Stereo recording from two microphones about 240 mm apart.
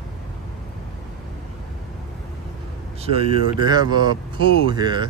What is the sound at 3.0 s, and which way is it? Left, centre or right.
Speech, right.